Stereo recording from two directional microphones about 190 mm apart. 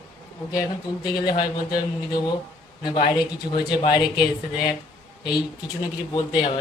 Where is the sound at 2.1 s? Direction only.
20° left (ahead or behind).